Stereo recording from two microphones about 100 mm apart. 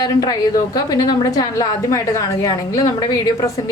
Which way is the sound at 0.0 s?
40° left (ahead or behind).